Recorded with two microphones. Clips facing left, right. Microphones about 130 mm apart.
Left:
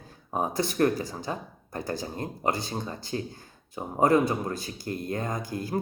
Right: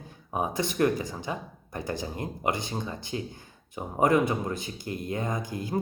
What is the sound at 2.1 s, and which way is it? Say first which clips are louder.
Speech: left 2 dB; 15° right (ahead or behind).